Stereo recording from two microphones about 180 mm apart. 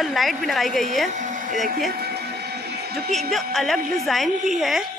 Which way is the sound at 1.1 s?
45° right (ahead or behind).